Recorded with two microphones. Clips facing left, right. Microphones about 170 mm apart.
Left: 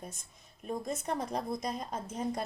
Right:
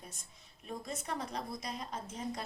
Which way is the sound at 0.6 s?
45° left (ahead or behind).